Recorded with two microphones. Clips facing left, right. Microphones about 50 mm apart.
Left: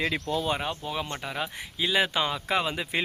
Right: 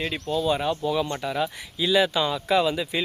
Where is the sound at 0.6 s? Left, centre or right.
Left.